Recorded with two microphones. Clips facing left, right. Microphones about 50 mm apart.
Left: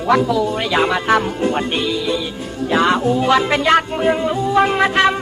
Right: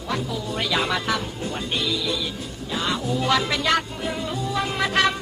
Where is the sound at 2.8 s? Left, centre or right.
Left.